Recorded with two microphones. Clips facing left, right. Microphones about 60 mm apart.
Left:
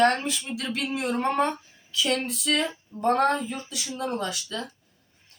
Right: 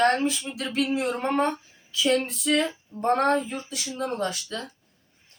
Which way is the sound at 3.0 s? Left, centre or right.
Right.